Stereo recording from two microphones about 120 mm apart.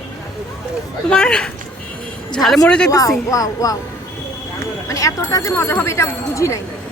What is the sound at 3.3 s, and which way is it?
Speech, 30° left (ahead or behind).